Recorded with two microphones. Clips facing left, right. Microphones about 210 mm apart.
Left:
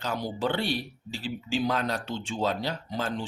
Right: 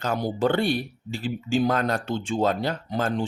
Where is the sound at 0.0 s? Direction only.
50° right (ahead or behind).